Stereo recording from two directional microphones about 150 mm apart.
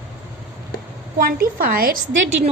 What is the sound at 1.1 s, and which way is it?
Speech, 75° right (ahead or behind).